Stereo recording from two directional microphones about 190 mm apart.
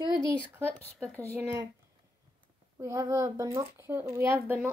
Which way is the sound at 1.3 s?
15° right (ahead or behind).